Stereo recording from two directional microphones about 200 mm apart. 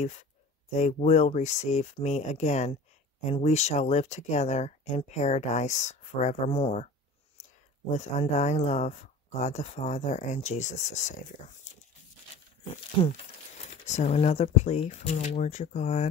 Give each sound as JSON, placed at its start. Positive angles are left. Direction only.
{"t": 0.7, "sound": "speech", "side_deg": 30}
{"t": 7.9, "sound": "speech", "side_deg": 35}
{"t": 13.8, "sound": "speech", "side_deg": 35}